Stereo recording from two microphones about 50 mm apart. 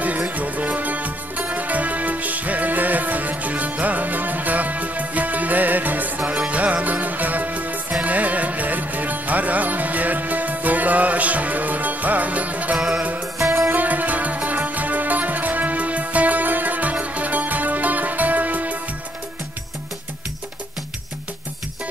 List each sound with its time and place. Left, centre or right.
0.3 s music: right
12.7 s music: centre
13.0 s music: right
13.5 s music: right
13.7 s music: right